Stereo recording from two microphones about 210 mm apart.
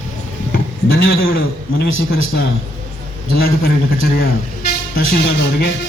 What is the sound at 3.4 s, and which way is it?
A man's voice, 50° left (ahead or behind).